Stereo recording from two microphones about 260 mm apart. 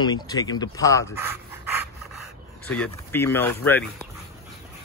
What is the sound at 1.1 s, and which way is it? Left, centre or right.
Dog, centre.